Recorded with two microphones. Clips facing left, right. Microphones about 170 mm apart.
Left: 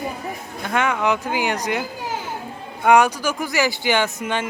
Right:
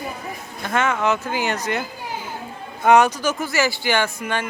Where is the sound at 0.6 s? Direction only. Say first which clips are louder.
Even; 10° left (ahead or behind).